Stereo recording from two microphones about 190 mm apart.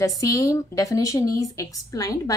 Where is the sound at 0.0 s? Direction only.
20° left (ahead or behind).